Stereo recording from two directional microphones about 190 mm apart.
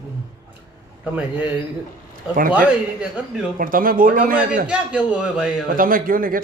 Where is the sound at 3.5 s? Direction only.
45° right (ahead or behind).